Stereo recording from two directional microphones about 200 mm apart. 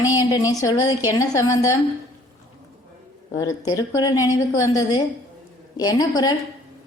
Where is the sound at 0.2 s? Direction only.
15° left (ahead or behind).